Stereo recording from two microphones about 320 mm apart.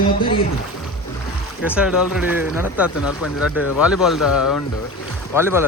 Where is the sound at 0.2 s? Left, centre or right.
Centre.